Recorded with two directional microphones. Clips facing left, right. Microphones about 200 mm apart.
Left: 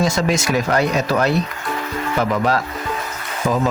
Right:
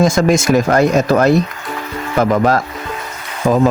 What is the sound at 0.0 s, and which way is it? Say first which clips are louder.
Speech: right 6 dB; 50° right (ahead or behind).